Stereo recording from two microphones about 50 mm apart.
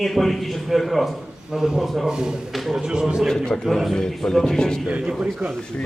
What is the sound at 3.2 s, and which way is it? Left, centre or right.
Speech, centre.